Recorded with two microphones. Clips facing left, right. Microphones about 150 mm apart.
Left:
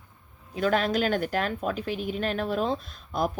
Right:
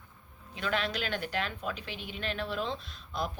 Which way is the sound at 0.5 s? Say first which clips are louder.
Left 8 dB; 45° left (ahead or behind).